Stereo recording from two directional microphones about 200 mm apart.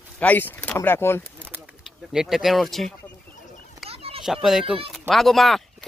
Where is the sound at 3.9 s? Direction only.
30° right (ahead or behind).